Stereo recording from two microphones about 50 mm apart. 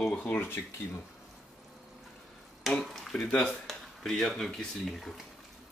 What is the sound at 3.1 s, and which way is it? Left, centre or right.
Speech, centre.